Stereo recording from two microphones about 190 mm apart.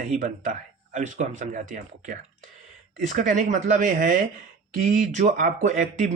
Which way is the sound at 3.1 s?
40° right (ahead or behind).